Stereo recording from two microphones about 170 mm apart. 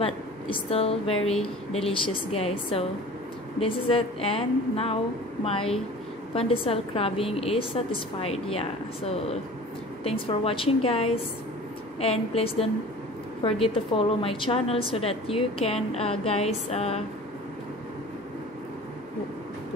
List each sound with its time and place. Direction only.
0.0 s a woman's voice: 35° left (ahead or behind)